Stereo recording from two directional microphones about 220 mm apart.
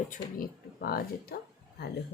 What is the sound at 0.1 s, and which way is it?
Speech, 40° left (ahead or behind).